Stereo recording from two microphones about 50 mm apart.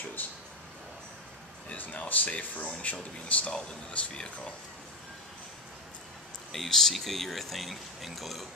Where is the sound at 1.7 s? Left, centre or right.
Left.